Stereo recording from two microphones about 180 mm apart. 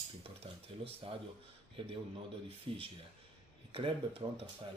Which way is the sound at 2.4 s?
30° right (ahead or behind).